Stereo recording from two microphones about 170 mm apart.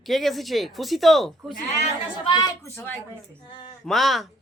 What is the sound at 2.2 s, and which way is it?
Speech, 20° left (ahead or behind).